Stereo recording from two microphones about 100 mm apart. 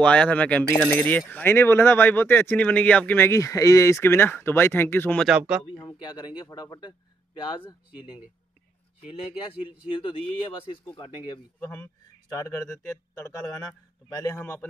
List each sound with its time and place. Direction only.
0.0 s speech: 10° left (ahead or behind)
3.3 s speech: 30° left (ahead or behind)
5.3 s speech: 10° right (ahead or behind)
5.9 s speech: 50° left (ahead or behind)
8.0 s speech: 10° right (ahead or behind)
9.5 s speech: 60° left (ahead or behind)